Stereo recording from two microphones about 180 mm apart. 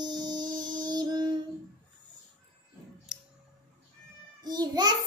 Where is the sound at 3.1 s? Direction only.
5° right (ahead or behind).